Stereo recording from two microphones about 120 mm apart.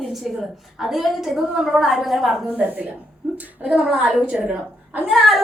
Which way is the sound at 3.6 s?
5° right (ahead or behind).